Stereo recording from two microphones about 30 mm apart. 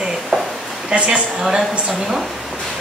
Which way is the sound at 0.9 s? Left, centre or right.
Right.